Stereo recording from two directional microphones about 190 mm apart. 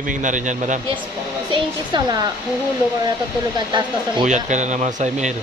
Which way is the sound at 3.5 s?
25° right (ahead or behind).